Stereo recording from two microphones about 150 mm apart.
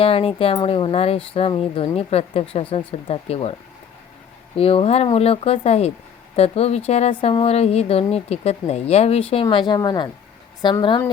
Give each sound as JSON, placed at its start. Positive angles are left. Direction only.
{"t": 0.0, "sound": "speech", "side_deg": 40}
{"t": 4.5, "sound": "speech", "side_deg": 40}